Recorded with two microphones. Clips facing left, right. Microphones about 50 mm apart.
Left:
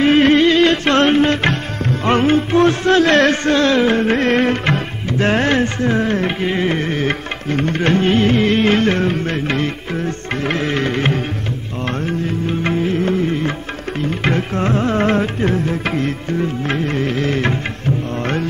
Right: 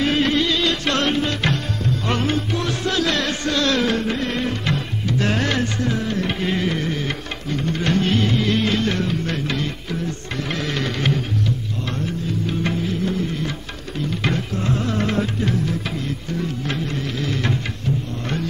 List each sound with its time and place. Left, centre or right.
0.0 s music: left
4.0 s music: left
6.4 s music: left
6.7 s music: left
7.9 s music: left
12.4 s music: left